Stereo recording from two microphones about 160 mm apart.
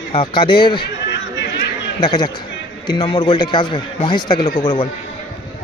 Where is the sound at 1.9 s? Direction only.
30° left (ahead or behind).